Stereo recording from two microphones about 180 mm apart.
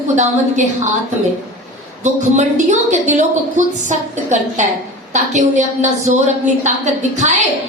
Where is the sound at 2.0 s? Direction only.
40° right (ahead or behind).